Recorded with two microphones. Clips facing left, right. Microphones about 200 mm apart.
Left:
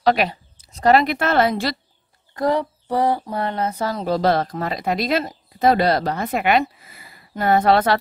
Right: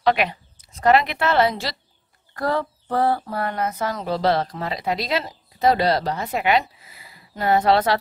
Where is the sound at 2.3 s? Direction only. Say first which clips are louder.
Left 3 dB; 15° left (ahead or behind).